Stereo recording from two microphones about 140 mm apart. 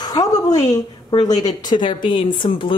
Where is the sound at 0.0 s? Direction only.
30° left (ahead or behind).